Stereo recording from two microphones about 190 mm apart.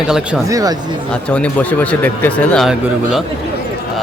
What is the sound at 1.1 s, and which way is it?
Speech, 5° left (ahead or behind).